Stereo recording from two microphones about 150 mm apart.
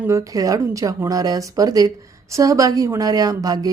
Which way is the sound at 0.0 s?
20° right (ahead or behind).